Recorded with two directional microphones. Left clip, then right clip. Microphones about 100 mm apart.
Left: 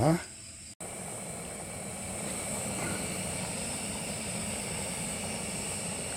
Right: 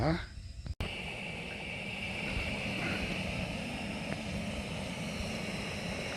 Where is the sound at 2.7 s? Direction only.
25° right (ahead or behind).